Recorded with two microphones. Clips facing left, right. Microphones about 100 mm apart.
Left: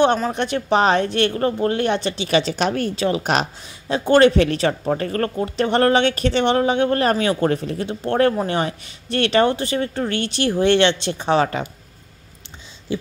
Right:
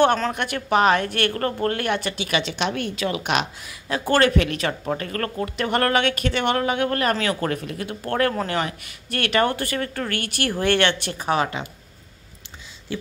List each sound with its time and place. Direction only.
0.3 s speech: 25° left (ahead or behind)
12.9 s speech: 20° left (ahead or behind)